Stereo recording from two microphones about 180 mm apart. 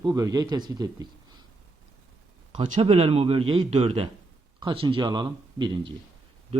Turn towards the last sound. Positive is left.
turn(degrees=-25)  # may be behind; listen again after turning